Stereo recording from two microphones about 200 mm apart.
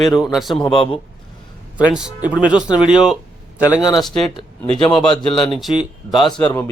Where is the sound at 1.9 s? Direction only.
5° right (ahead or behind).